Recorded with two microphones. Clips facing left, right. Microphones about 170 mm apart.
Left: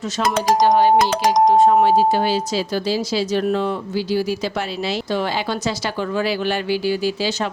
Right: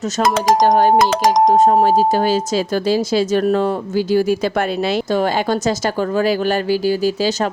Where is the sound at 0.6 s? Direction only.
45° right (ahead or behind).